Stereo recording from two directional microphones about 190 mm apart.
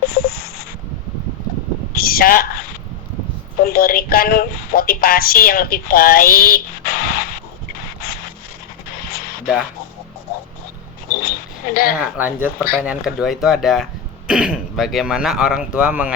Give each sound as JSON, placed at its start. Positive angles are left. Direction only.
{"t": 0.0, "sound": "a sound", "side_deg": 55}
{"t": 2.0, "sound": "speech", "side_deg": 50}
{"t": 3.6, "sound": "speech", "side_deg": 50}
{"t": 11.7, "sound": "speech", "side_deg": 50}
{"t": 11.9, "sound": "speech", "side_deg": -10}